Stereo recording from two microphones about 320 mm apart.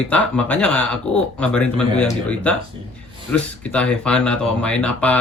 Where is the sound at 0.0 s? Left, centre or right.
Centre.